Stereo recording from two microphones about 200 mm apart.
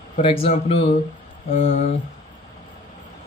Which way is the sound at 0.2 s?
25° left (ahead or behind).